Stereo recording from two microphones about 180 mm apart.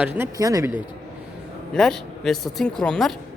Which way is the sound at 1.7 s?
Centre (ahead or behind).